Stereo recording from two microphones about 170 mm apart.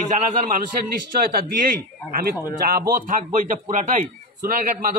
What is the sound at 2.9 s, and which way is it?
A man's voice, 50° right (ahead or behind).